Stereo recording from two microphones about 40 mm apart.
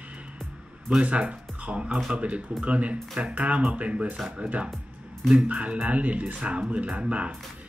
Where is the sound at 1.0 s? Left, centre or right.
Right.